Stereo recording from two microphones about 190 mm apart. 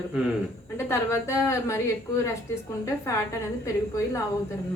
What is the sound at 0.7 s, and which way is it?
A woman's voice, 15° left (ahead or behind).